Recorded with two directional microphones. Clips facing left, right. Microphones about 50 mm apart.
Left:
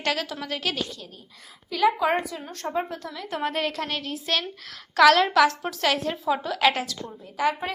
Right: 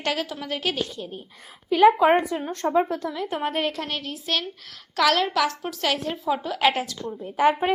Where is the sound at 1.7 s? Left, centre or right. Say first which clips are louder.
Right 6 dB; right.